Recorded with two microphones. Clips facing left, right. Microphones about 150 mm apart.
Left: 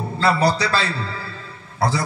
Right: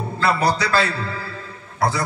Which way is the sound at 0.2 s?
30° left (ahead or behind).